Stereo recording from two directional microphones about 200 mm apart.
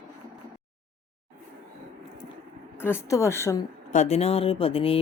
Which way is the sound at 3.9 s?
35° left (ahead or behind).